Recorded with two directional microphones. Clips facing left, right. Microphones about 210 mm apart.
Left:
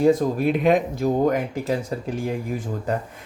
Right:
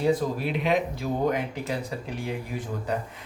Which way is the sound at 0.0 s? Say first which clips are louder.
Left 6 dB; 50° left (ahead or behind).